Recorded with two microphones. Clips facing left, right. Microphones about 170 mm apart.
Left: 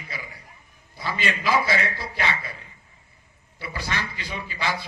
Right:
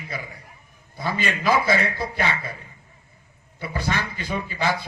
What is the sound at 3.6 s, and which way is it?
A man's voice, 50° right (ahead or behind).